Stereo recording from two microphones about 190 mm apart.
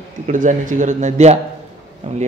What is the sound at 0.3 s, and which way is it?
A man's voice, 40° right (ahead or behind).